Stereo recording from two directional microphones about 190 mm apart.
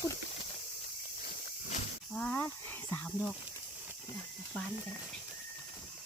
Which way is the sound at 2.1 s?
10° left (ahead or behind).